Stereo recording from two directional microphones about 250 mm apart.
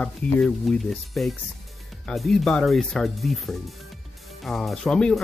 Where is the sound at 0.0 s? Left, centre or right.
Centre.